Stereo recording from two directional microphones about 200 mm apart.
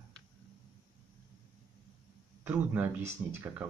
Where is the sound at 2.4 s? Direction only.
10° right (ahead or behind).